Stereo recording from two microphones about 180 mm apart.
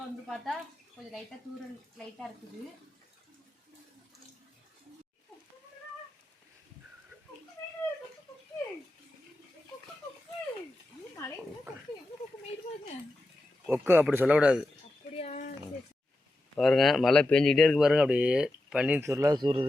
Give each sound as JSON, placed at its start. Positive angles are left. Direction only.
{"t": 0.3, "sound": "speech", "side_deg": 0}
{"t": 13.7, "sound": "speech", "side_deg": -10}
{"t": 15.2, "sound": "a sound", "side_deg": 40}
{"t": 16.6, "sound": "speech", "side_deg": 0}